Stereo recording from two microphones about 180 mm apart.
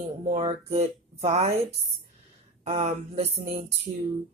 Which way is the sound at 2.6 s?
35° right (ahead or behind).